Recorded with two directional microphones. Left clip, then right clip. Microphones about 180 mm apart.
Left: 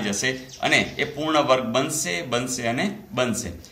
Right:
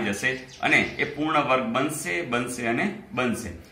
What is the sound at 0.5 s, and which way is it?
Speech, 55° left (ahead or behind).